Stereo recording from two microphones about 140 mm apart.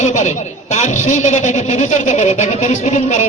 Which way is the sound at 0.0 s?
60° left (ahead or behind).